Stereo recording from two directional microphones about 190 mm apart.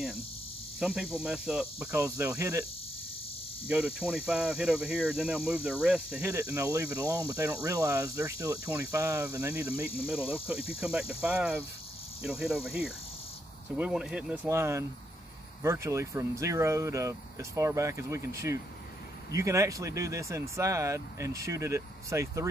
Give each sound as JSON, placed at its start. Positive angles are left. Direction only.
{"t": 0.7, "sound": "speech", "side_deg": -5}
{"t": 3.6, "sound": "speech", "side_deg": -5}
{"t": 10.8, "sound": "speech", "side_deg": -5}